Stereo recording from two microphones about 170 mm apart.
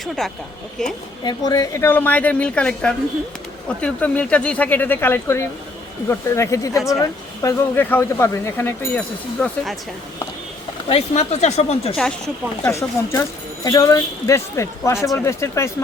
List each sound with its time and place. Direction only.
0.2 s speech: centre (ahead or behind)
1.2 s speech: 25° left (ahead or behind); by 9.7 s 5° left (ahead or behind)
10.8 s speech: 35° left (ahead or behind)
13.7 s speech: 20° left (ahead or behind)